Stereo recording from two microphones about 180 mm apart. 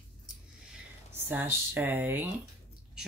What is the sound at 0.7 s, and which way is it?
Speech, 10° right (ahead or behind).